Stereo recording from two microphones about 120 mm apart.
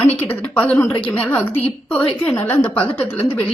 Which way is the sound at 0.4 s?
10° left (ahead or behind).